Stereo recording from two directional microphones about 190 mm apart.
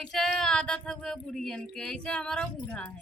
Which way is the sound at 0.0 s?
5° left (ahead or behind).